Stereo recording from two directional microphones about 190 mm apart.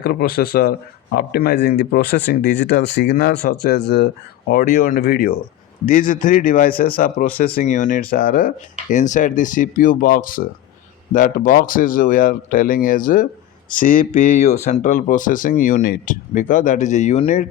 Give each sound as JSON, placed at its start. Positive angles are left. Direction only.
{"t": 0.0, "sound": "speech", "side_deg": 55}